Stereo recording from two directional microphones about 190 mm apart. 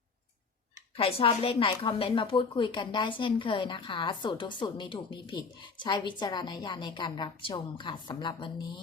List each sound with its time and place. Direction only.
0.9 s a woman's voice: 30° left (ahead or behind)